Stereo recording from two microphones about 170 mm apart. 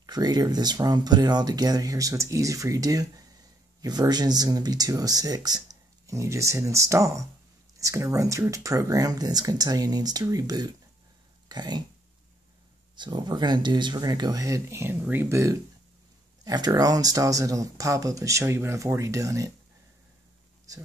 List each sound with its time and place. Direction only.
0.0 s speech: 25° right (ahead or behind)
12.9 s speech: 25° right (ahead or behind)
20.7 s speech: 20° right (ahead or behind)